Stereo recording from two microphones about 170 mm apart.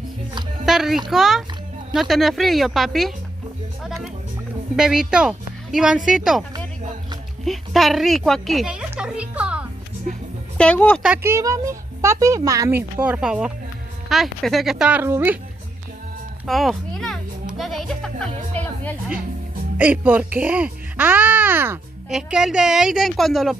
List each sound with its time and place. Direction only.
0.7 s a child's voice: centre (ahead or behind)
7.4 s a woman's voice: centre (ahead or behind)
10.6 s speech: 10° left (ahead or behind)
11.0 s speech: 5° right (ahead or behind)
11.3 s a child's voice: 20° right (ahead or behind)
13.0 s a woman's voice: 5° right (ahead or behind)
16.4 s music: centre (ahead or behind)
19.8 s speech: 10° right (ahead or behind)